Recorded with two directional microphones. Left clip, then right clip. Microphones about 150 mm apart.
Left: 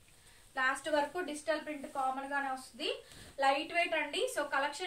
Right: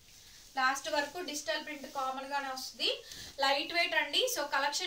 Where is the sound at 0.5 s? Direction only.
20° left (ahead or behind).